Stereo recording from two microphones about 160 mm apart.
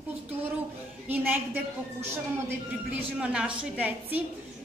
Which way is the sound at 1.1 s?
10° right (ahead or behind).